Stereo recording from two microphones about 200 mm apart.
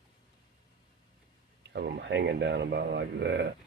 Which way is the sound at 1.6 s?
55° right (ahead or behind).